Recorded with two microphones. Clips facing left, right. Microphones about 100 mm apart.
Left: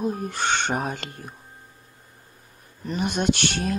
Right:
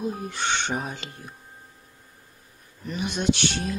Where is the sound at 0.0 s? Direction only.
50° left (ahead or behind).